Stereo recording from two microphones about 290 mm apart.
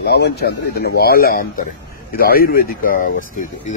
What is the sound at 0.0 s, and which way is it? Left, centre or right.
A man's voice, left.